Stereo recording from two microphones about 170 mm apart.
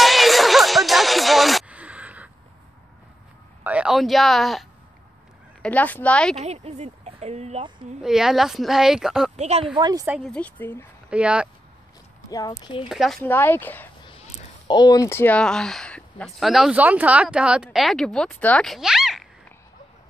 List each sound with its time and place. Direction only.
0.0 s music: centre (ahead or behind)
3.6 s speech: 5° right (ahead or behind)
6.3 s speech: 40° right (ahead or behind)
8.0 s speech: 5° right (ahead or behind)
9.4 s speech: 40° right (ahead or behind)
9.8 s a woman's voice: 25° right (ahead or behind)
10.0 s speech: 5° right (ahead or behind)
10.3 s speech: 10° left (ahead or behind)
11.1 s speech: 5° right (ahead or behind)
12.3 s speech: 20° left (ahead or behind)
12.8 s speech: centre (ahead or behind)
13.2 s speech: 10° left (ahead or behind)
14.7 s speech: 25° left (ahead or behind); by 19.2 s 5° right (ahead or behind)